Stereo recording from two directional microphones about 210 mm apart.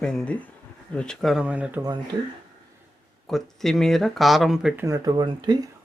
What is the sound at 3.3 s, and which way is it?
Speech, centre (ahead or behind).